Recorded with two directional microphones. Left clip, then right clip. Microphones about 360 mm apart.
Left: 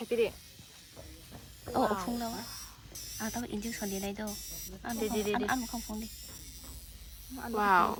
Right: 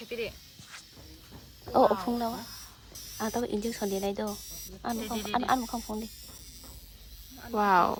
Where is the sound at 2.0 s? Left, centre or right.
Right.